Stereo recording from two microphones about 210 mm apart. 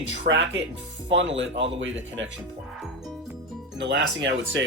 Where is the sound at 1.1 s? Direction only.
60° right (ahead or behind).